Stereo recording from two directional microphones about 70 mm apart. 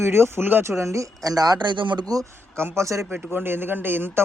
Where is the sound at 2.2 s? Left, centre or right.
Right.